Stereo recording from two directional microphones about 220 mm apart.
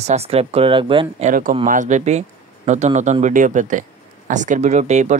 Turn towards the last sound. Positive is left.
turn(degrees=-30)  # may be behind; listen again after turning